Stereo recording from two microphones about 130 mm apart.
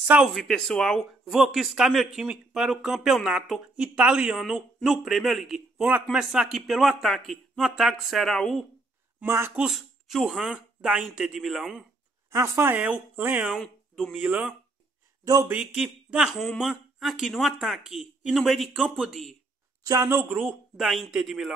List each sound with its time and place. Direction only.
0.0 s speech: 5° right (ahead or behind)
0.4 s speech: 5° left (ahead or behind)
9.2 s speech: 20° right (ahead or behind)
9.6 s speech: 5° right (ahead or behind)
12.3 s speech: 20° right (ahead or behind)
13.6 s speech: centre (ahead or behind)
19.8 s speech: 30° right (ahead or behind)
20.2 s speech: 15° right (ahead or behind)
20.7 s speech: centre (ahead or behind)